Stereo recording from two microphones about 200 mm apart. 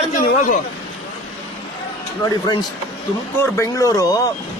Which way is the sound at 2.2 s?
20° left (ahead or behind).